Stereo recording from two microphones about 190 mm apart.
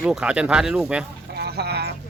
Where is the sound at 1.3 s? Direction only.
55° right (ahead or behind).